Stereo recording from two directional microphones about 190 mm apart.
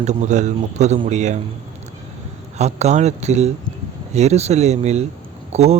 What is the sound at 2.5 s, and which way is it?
Speech, 35° right (ahead or behind).